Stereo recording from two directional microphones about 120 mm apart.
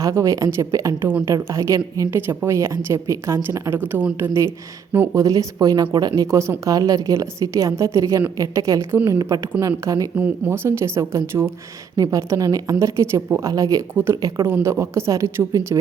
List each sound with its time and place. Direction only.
0.0 s speech: 25° right (ahead or behind)
1.0 s a woman's voice: 15° right (ahead or behind)
10.2 s speech: 15° right (ahead or behind)